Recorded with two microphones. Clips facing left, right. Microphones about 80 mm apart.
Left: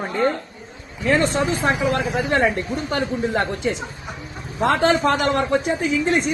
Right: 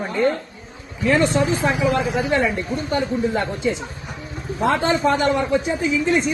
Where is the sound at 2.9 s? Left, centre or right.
Left.